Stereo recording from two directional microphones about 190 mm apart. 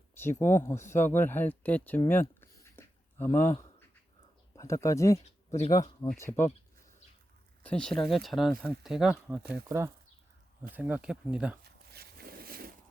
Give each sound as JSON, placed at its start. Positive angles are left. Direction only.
{"t": 0.1, "sound": "speech", "side_deg": 10}
{"t": 2.4, "sound": "a sound", "side_deg": 10}
{"t": 4.5, "sound": "speech", "side_deg": 15}
{"t": 7.6, "sound": "speech", "side_deg": 5}
{"t": 9.6, "sound": "speech", "side_deg": -15}
{"t": 11.6, "sound": "a sound", "side_deg": -55}